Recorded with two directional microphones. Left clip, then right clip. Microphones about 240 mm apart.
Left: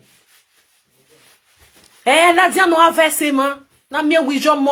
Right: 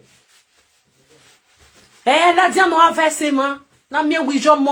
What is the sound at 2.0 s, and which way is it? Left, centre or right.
Speech, left.